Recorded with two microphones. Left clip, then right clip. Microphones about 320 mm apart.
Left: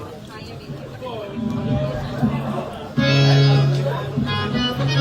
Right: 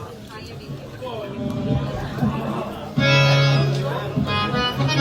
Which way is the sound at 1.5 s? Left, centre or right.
Right.